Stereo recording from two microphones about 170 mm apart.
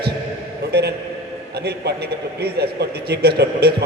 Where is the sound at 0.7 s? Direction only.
75° right (ahead or behind).